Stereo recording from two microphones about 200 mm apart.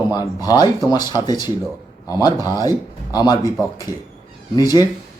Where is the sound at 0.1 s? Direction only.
20° left (ahead or behind).